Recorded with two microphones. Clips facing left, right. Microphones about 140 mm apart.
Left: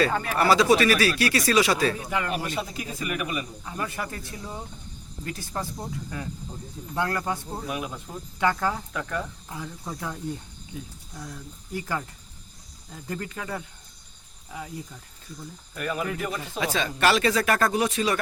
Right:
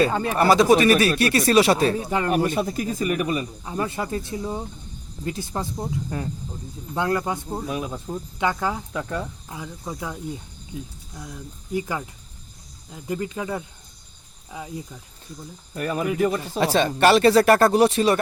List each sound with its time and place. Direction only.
0.0 s speech: 25° right (ahead or behind)
2.3 s speech: 50° right (ahead or behind); by 5.9 s 20° right (ahead or behind)
6.1 s speech: 35° right (ahead or behind)
6.9 s speech: 20° right (ahead or behind)
15.7 s speech: 35° right (ahead or behind)